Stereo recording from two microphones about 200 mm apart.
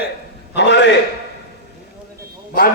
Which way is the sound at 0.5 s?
60° left (ahead or behind).